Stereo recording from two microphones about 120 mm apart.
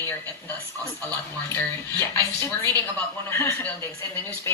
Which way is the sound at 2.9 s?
20° left (ahead or behind).